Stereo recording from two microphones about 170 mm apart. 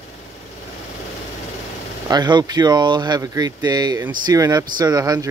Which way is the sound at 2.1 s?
25° right (ahead or behind).